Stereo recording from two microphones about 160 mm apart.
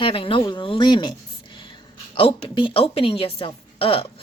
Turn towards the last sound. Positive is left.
turn(degrees=35)  # may be behind; listen again after turning